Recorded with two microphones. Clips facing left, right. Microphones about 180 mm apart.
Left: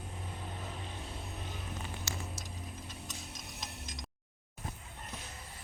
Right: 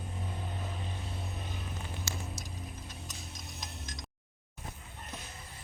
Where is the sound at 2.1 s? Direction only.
75° right (ahead or behind).